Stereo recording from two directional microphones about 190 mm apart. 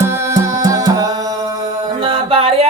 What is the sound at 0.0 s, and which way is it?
Music, 15° right (ahead or behind).